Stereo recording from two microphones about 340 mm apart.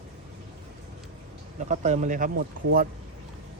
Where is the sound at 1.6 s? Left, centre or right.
Right.